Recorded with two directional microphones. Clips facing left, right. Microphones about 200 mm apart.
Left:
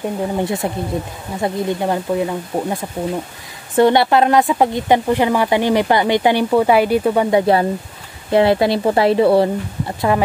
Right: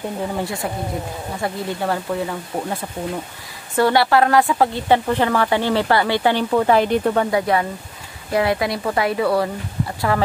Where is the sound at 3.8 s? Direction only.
20° left (ahead or behind).